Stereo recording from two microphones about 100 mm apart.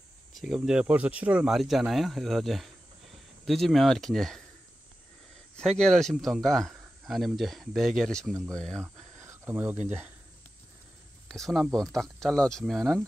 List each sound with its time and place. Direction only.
0.3 s speech: centre (ahead or behind)
5.8 s speech: 5° left (ahead or behind)
8.8 s speech: 25° right (ahead or behind)
11.2 s speech: 5° left (ahead or behind)